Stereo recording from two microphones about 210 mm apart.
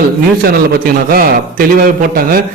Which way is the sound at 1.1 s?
45° right (ahead or behind).